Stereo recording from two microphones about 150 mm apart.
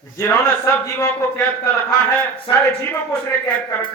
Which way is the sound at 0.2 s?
20° left (ahead or behind).